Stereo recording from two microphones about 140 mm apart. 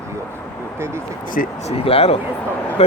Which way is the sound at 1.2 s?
75° left (ahead or behind).